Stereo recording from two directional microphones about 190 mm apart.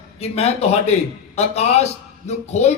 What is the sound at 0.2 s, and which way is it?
A man's voice, 35° left (ahead or behind).